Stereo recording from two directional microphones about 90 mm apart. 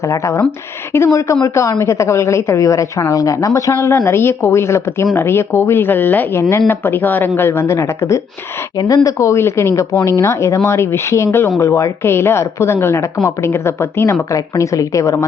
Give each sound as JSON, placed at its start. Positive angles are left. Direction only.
{"t": 0.0, "sound": "a woman's voice", "side_deg": 35}